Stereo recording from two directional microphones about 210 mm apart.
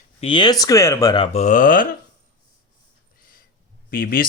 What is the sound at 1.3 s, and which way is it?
Speech, 35° left (ahead or behind).